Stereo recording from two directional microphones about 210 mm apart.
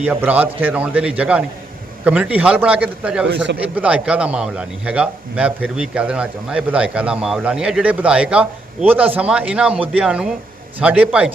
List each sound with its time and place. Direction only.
0.0 s a man's voice: 5° right (ahead or behind)
3.2 s speech: 55° right (ahead or behind)
3.8 s a man's voice: 5° right (ahead or behind)